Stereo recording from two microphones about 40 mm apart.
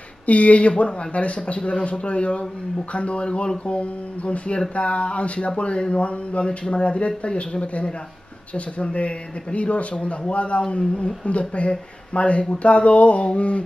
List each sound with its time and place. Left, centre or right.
0.3 s a man's voice: left